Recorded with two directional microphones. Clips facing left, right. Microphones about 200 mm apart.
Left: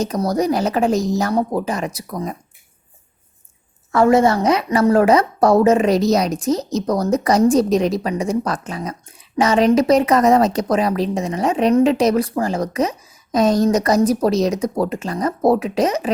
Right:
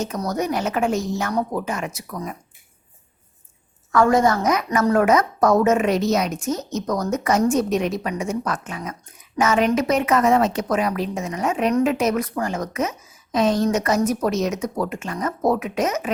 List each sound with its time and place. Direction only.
0.0 s a woman's voice: 35° left (ahead or behind)
3.9 s a woman's voice: 25° left (ahead or behind)